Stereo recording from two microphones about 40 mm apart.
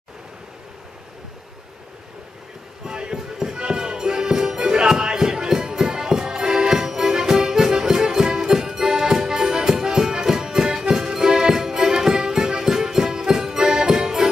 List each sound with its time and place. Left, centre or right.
2.8 s music: centre